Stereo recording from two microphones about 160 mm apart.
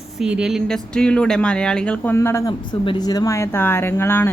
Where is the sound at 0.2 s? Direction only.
5° right (ahead or behind).